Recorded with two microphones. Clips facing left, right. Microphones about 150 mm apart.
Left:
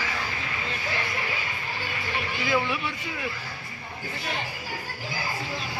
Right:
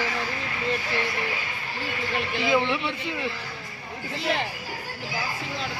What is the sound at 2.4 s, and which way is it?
Speech, 25° right (ahead or behind).